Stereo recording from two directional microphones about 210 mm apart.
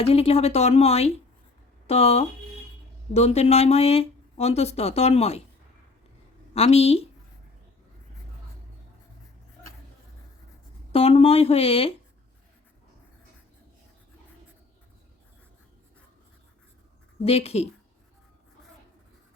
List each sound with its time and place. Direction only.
0.0 s speech: 30° left (ahead or behind)
6.5 s speech: 30° left (ahead or behind)
10.9 s speech: 25° left (ahead or behind)
17.2 s speech: 30° left (ahead or behind)